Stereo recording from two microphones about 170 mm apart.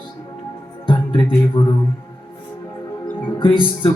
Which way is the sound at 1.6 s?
25° left (ahead or behind).